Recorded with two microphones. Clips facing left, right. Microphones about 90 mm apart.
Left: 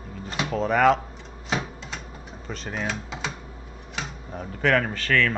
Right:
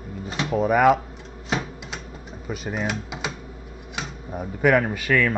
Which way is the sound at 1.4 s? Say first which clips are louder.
Right 1 dB; 5° right (ahead or behind).